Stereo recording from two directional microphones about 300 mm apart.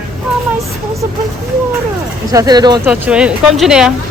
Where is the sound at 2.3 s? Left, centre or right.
Centre.